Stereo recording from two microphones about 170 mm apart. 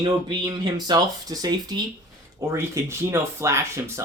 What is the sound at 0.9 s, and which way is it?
Speech, 20° right (ahead or behind).